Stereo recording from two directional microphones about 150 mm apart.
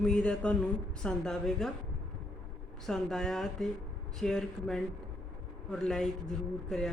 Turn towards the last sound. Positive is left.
turn(degrees=5)  # may be behind; listen again after turning